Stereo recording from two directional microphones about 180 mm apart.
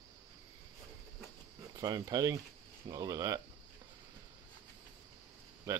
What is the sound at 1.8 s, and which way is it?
Speech, 20° right (ahead or behind).